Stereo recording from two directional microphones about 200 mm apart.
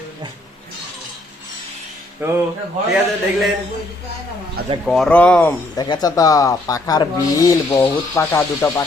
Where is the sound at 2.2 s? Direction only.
10° right (ahead or behind).